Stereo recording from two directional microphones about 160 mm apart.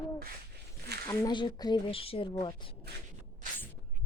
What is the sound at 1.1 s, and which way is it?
Speech, 25° left (ahead or behind).